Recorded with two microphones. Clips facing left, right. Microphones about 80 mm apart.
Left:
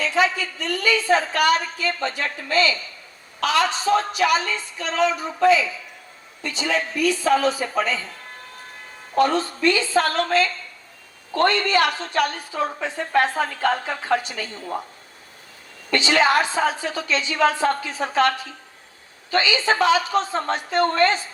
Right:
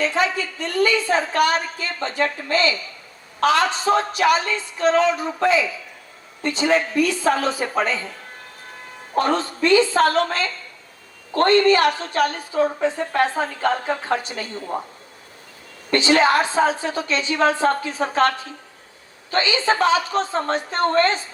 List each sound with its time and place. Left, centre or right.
0.0 s a woman's voice: right
9.1 s a woman's voice: right
15.9 s a woman's voice: right